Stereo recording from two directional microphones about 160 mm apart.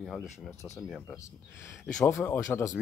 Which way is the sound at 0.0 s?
Centre (ahead or behind).